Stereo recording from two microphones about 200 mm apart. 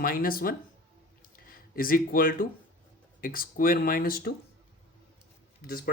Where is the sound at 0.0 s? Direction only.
45° left (ahead or behind).